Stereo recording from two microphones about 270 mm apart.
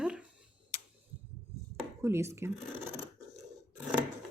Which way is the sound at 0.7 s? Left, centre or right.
Left.